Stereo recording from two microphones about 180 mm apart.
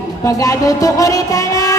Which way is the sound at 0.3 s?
20° left (ahead or behind).